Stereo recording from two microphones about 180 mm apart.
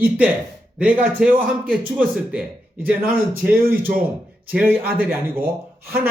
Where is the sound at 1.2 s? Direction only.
5° right (ahead or behind).